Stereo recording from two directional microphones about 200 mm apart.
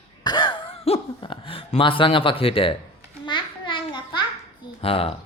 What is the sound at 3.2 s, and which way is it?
Babbling, 25° left (ahead or behind).